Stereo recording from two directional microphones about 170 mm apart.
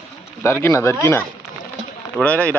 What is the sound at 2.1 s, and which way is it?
Speech, 10° left (ahead or behind).